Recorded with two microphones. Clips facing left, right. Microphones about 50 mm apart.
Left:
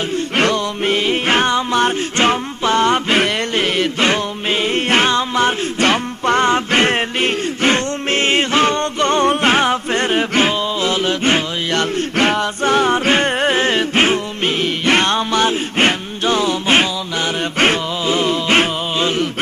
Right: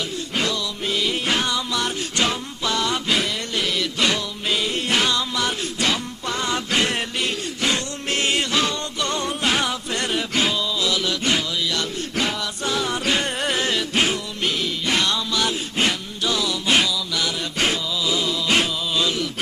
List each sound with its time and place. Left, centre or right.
0.3 s music: left